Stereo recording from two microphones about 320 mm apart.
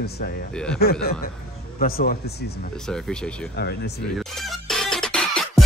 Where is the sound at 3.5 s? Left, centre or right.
Left.